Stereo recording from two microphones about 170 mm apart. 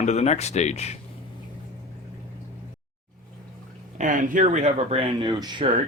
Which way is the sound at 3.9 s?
50° right (ahead or behind).